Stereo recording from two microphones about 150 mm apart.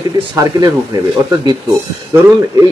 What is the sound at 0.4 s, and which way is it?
A man's voice, 25° right (ahead or behind).